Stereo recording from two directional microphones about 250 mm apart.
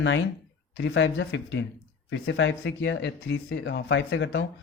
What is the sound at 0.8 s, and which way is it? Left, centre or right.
Speech, left.